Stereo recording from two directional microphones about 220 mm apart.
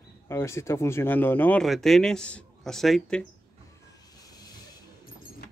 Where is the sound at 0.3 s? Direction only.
10° left (ahead or behind).